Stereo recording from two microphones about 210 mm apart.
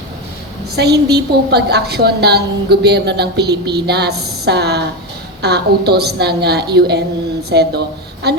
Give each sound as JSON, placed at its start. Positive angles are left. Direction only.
{"t": 0.8, "sound": "a woman's voice", "side_deg": -50}